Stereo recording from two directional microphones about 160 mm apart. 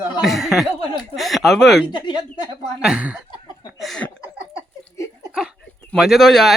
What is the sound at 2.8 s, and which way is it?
Speech, 5° right (ahead or behind).